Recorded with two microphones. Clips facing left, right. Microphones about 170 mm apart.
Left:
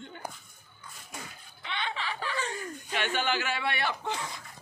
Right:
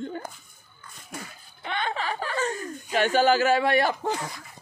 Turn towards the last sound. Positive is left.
turn(degrees=-40)  # may be behind; listen again after turning